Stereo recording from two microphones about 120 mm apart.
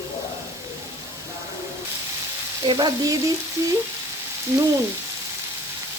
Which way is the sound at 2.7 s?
35° right (ahead or behind).